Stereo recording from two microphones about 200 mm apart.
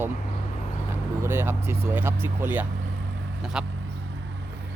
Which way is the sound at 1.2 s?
10° right (ahead or behind).